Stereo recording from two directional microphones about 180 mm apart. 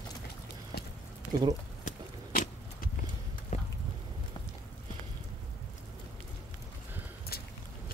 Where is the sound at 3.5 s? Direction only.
35° left (ahead or behind).